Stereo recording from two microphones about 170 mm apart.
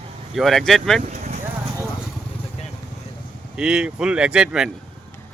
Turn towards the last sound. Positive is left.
turn(degrees=-5)  # may be behind; listen again after turning